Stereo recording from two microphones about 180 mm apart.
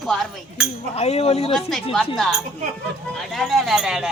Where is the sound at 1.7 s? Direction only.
Centre (ahead or behind).